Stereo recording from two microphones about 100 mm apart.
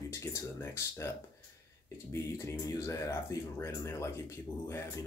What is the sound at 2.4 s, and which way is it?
Speech, 30° left (ahead or behind).